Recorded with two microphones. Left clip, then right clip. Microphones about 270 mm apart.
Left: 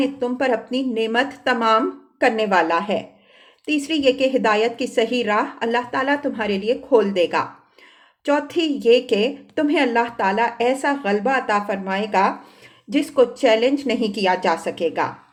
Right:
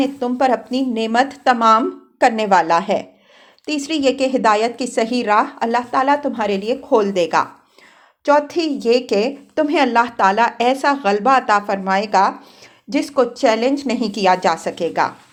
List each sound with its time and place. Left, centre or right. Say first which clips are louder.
0.0 s a woman's voice: right 4 dB; right